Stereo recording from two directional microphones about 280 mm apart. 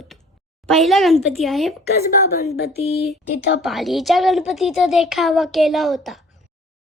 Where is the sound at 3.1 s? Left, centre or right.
Left.